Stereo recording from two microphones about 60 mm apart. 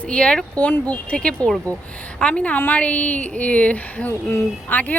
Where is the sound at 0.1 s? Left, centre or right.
Centre.